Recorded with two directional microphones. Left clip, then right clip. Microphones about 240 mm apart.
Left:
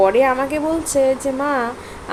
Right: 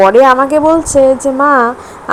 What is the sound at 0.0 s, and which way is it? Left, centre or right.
A woman's voice, centre.